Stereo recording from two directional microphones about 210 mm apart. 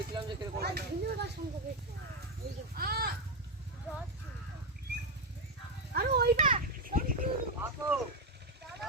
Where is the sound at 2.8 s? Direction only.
45° right (ahead or behind).